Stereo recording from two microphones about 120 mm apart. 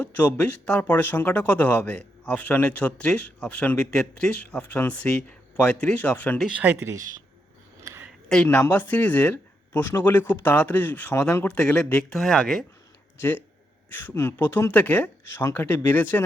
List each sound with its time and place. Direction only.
0.0 s speech: 10° left (ahead or behind)
6.4 s speech: 10° right (ahead or behind)
8.4 s speech: 15° left (ahead or behind); by 12.6 s centre (ahead or behind)
13.9 s speech: 20° left (ahead or behind)